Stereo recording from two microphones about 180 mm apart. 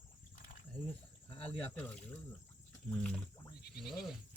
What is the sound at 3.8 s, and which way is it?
Speech, centre (ahead or behind).